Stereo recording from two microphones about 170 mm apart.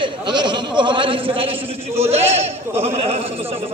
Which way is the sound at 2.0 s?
40° right (ahead or behind).